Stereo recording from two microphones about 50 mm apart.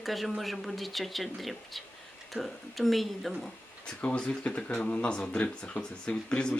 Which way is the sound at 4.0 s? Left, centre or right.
Left.